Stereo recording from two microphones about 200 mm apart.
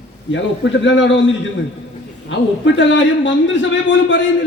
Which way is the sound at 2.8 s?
65° left (ahead or behind).